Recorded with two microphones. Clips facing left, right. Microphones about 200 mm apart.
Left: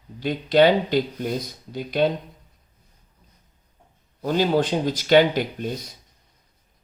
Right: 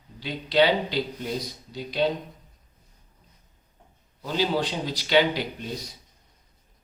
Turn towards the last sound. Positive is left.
turn(degrees=50)  # may be behind; listen again after turning